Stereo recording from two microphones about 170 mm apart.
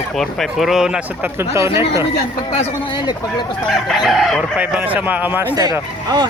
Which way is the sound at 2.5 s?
25° left (ahead or behind).